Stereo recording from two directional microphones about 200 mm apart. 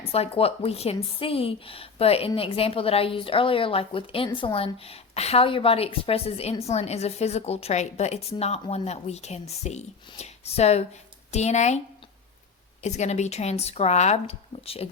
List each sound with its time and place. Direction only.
0.0 s a woman's voice: 30° left (ahead or behind)
12.8 s speech: 35° left (ahead or behind)